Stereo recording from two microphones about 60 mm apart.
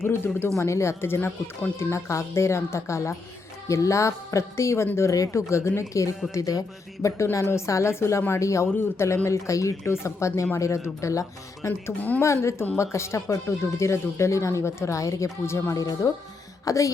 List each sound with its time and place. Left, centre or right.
0.3 s speech: left
1.9 s speech: left
6.3 s speech: left
7.3 s speech: left
8.7 s speech: left
9.2 s speech: left
11.9 s speech: left
12.2 s speech: left
15.7 s speech: left